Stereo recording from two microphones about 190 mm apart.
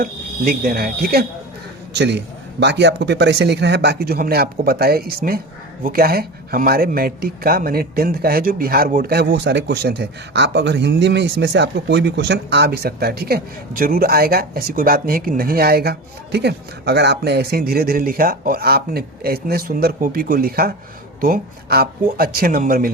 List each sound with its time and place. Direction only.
0.0 s speech: 50° right (ahead or behind)
1.9 s a man's voice: 65° right (ahead or behind); by 22.9 s 50° right (ahead or behind)